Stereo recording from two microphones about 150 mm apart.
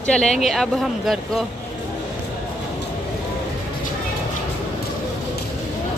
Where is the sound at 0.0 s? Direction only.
5° left (ahead or behind).